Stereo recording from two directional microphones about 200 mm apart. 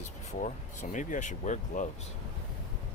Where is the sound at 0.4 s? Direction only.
40° left (ahead or behind).